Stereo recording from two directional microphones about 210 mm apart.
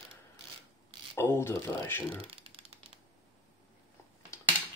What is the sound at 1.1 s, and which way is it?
Speech, 10° left (ahead or behind).